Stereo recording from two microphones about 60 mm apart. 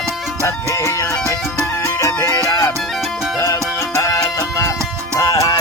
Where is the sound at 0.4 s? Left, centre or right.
Left.